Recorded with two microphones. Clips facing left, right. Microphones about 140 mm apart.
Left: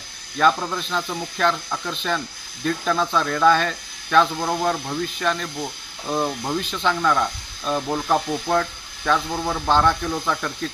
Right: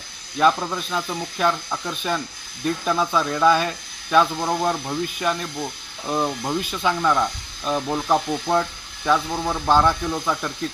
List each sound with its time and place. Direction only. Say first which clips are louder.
0.3 s speech: even; 10° right (ahead or behind)
9.0 s speech: right 1 dB; 5° right (ahead or behind)